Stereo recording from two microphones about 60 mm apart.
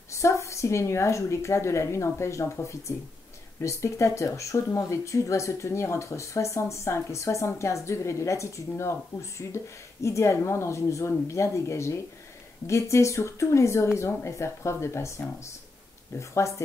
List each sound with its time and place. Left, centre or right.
0.1 s a woman's voice: left